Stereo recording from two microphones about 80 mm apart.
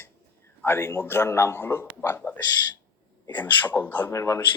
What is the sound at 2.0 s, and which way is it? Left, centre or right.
A man's voice, left.